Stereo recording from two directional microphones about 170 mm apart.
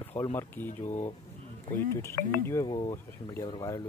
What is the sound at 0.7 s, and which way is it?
Speech, 45° left (ahead or behind).